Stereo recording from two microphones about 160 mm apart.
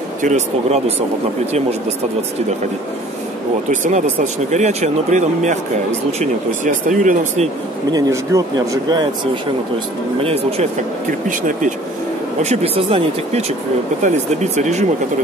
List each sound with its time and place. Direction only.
0.2 s speech: 45° right (ahead or behind)
3.7 s speech: 50° right (ahead or behind)
7.9 s speech: 20° right (ahead or behind)
10.2 s speech: 40° right (ahead or behind)
11.2 s speech: 55° right (ahead or behind)
12.4 s speech: 35° right (ahead or behind)